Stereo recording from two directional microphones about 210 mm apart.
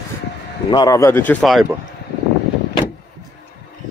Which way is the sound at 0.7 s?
20° left (ahead or behind).